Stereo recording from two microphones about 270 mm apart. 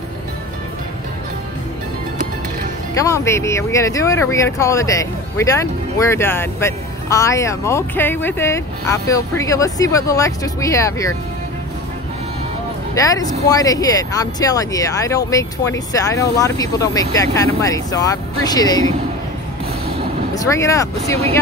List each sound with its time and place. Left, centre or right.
2.9 s speech: centre
13.0 s speech: centre
20.3 s speech: centre